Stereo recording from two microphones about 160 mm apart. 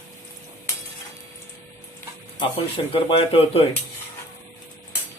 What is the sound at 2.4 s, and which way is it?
Speech, 35° left (ahead or behind).